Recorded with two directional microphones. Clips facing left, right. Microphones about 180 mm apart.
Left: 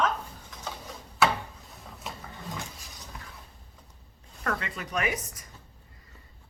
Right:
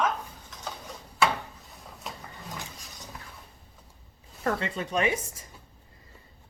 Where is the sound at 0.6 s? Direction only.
Centre (ahead or behind).